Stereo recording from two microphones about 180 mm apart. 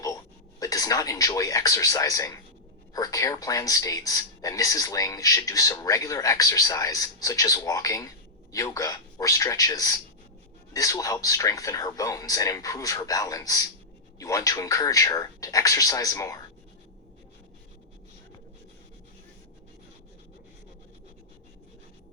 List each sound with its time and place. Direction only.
0.6 s speech: 20° left (ahead or behind)